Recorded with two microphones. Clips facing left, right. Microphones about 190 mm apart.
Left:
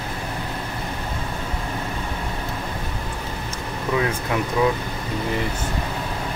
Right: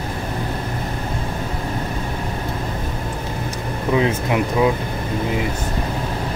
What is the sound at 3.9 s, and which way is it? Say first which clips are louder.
Speech: right 5 dB; 20° right (ahead or behind).